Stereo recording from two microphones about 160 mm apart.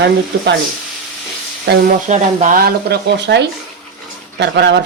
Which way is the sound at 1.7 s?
90° right.